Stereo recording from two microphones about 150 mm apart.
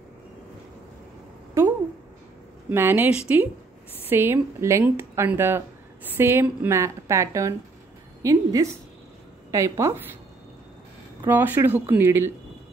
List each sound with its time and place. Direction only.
1.6 s a woman's voice: 20° right (ahead or behind)
11.2 s speech: 15° right (ahead or behind)